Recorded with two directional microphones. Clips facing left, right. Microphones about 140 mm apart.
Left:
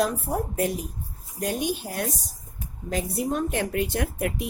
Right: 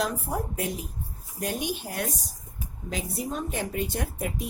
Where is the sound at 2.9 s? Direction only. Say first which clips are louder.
Left 5 dB; 60° left (ahead or behind).